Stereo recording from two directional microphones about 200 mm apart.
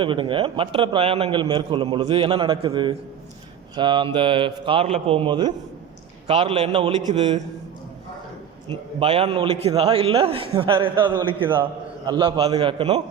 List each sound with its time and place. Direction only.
0.0 s a man's voice: 25° right (ahead or behind)
9.0 s a man's voice: 30° right (ahead or behind)